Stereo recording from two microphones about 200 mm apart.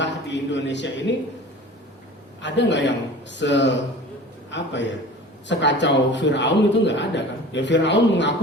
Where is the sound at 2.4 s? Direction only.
60° left (ahead or behind).